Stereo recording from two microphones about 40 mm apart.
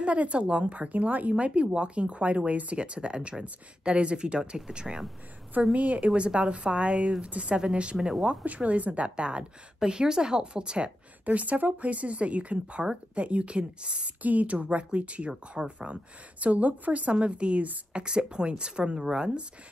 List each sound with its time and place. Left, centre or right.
0.0 s speech: right
1.3 s a woman's voice: right
5.6 s speech: right
6.2 s a woman's voice: right
8.5 s a woman's voice: right
11.2 s a woman's voice: right
14.2 s a woman's voice: right; by 19.4 s centre